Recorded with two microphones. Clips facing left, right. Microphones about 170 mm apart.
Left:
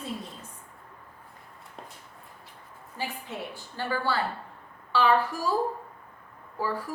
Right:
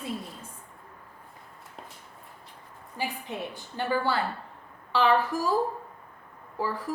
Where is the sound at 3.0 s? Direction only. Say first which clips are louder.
Right 2 dB; 15° right (ahead or behind).